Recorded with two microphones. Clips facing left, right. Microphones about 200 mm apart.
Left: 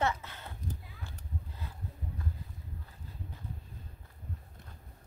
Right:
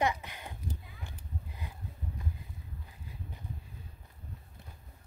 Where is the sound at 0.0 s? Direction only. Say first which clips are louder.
Right 1 dB; 15° right (ahead or behind).